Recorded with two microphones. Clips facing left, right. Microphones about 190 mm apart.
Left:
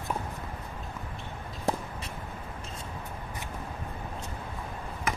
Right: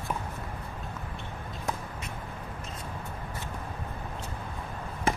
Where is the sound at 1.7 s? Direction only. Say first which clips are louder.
Left 5 dB; 30° left (ahead or behind).